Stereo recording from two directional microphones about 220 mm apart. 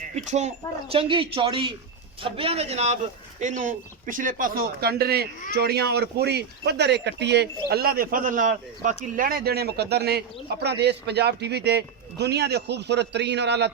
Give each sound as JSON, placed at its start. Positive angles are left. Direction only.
{"t": 0.2, "sound": "a man's voice", "side_deg": -30}